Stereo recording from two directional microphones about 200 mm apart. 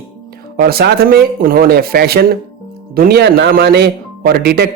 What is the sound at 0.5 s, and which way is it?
Speech, 50° right (ahead or behind).